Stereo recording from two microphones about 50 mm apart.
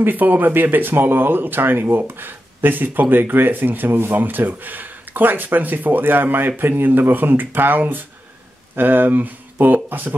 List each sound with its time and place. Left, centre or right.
0.0 s speech: right